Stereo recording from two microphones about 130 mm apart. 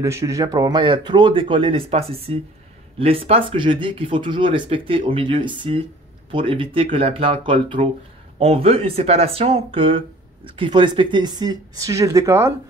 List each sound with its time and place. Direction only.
0.0 s speech: 25° right (ahead or behind)